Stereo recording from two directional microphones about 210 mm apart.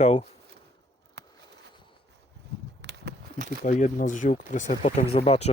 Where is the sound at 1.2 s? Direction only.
55° right (ahead or behind).